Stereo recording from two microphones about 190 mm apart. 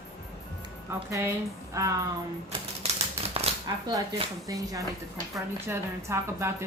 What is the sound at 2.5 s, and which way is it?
Typewriter, 30° right (ahead or behind).